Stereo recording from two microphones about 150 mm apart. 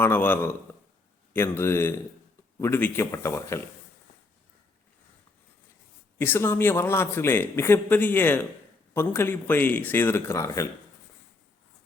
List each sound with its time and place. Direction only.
0.0 s speech: 15° left (ahead or behind)
6.1 s speech: 15° left (ahead or behind)